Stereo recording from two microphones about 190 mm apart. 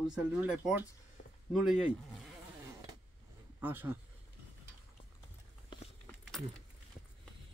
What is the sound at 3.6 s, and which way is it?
Speech, 10° right (ahead or behind).